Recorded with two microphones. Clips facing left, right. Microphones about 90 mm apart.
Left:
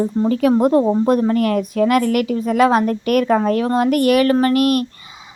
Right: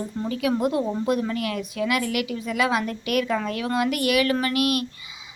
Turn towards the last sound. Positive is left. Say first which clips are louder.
# left 8 dB
turn(degrees=40)  # may be behind; listen again after turning